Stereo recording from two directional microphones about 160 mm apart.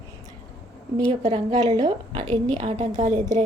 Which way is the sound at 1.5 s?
25° right (ahead or behind).